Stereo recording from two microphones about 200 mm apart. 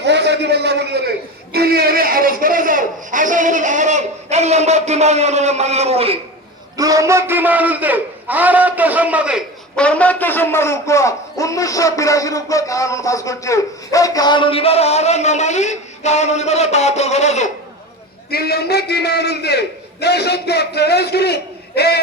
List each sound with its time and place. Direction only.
0.0 s a sound: 60° right (ahead or behind); by 6.1 s 30° right (ahead or behind)
6.7 s a man's voice: 15° right (ahead or behind); by 17.5 s 35° left (ahead or behind)
18.3 s a man's voice: 50° left (ahead or behind)